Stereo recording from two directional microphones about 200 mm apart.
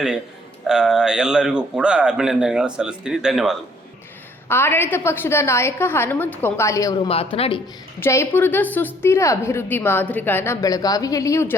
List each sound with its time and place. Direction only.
0.7 s a man's voice: 5° right (ahead or behind)
4.4 s a woman's voice: 10° left (ahead or behind); by 7.6 s 25° left (ahead or behind)
8.0 s a woman's voice: 10° left (ahead or behind)